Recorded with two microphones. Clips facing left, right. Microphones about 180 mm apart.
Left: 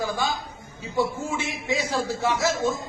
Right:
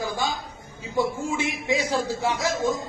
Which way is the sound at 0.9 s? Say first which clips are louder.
Right 1 dB; 15° right (ahead or behind).